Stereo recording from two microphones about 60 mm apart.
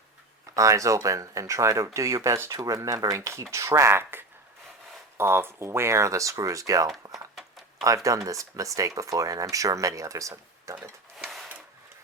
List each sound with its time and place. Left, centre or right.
0.5 s speech: right
7.1 s a sound: centre
7.8 s speech: right